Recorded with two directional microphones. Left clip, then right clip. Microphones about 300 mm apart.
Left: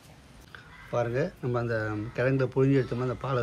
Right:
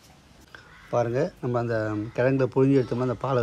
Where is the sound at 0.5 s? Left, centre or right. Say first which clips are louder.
Right 5 dB; centre.